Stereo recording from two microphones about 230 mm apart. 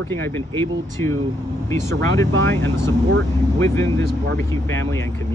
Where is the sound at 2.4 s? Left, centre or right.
Centre.